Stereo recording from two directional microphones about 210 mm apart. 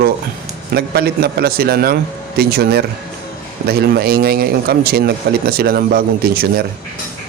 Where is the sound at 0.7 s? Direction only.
50° right (ahead or behind).